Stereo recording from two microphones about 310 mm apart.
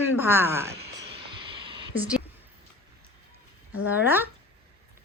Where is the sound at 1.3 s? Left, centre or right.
Centre.